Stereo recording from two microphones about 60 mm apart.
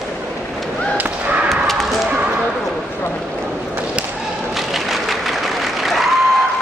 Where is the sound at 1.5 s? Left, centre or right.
Centre.